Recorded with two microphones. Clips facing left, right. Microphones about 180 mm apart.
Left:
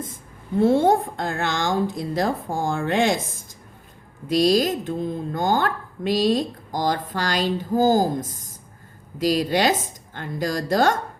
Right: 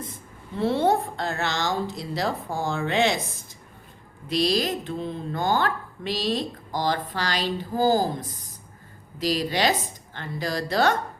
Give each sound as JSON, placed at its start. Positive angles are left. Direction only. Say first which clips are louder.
{"t": 0.1, "sound": "a woman's voice", "louder": "left 9 dB", "side_deg": 50}